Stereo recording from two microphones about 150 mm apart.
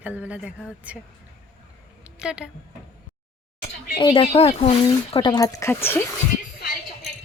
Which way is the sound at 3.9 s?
35° left (ahead or behind).